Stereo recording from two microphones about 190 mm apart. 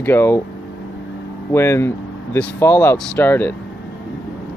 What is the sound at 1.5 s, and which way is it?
Speech, 15° left (ahead or behind).